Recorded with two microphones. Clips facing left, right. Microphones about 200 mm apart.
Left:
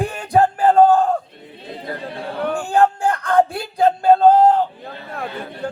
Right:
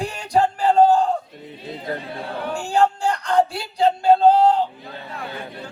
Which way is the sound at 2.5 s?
55° left (ahead or behind).